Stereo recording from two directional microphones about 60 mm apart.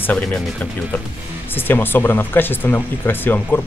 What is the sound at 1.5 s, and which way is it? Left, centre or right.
Speech, left.